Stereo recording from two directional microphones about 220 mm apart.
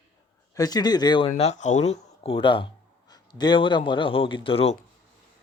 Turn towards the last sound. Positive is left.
turn(degrees=25)  # may be behind; listen again after turning